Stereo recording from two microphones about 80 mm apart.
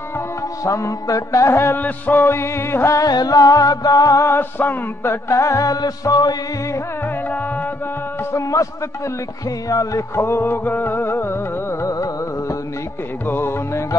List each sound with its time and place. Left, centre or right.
0.7 s music: left
3.1 s music: left
8.3 s music: left
9.7 s music: left
11.8 s music: left
13.3 s music: left